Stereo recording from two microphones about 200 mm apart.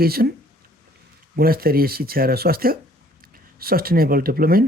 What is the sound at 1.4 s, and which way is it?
Speech, 50° right (ahead or behind).